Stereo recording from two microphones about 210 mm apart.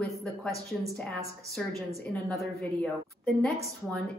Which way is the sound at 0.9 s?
Centre (ahead or behind).